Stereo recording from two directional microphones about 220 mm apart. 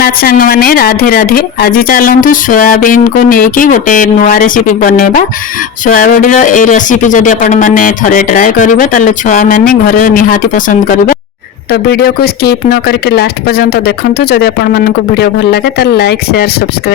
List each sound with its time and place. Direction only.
0.0 s speech: 40° left (ahead or behind)